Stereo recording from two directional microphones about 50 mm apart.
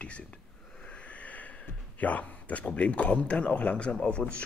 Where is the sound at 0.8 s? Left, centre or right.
Left.